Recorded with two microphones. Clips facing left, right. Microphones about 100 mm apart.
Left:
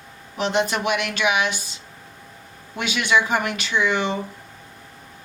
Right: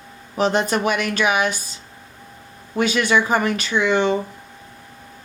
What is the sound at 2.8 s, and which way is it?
Speech, 40° right (ahead or behind).